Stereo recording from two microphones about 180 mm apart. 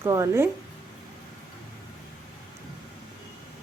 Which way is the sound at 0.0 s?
15° right (ahead or behind).